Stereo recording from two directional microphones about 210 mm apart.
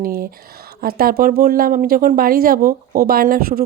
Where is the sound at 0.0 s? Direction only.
45° right (ahead or behind).